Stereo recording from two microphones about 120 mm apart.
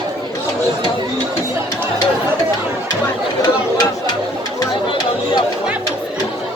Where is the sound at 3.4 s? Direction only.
35° left (ahead or behind).